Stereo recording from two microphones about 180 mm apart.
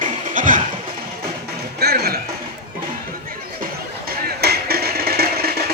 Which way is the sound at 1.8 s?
60° right (ahead or behind).